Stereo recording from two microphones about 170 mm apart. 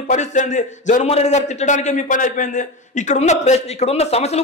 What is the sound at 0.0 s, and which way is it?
A man's voice, 45° left (ahead or behind).